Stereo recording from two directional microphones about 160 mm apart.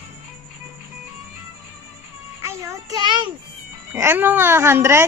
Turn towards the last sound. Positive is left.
turn(degrees=-15)  # may be behind; listen again after turning